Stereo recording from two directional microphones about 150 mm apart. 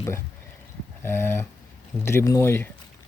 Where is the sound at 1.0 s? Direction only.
15° left (ahead or behind).